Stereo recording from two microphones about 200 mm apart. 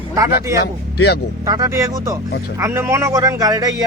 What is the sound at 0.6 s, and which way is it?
Speech, 55° left (ahead or behind).